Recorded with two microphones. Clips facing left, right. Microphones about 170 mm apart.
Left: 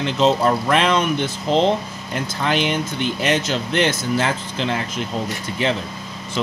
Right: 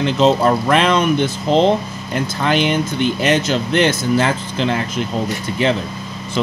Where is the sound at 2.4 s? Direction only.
55° right (ahead or behind).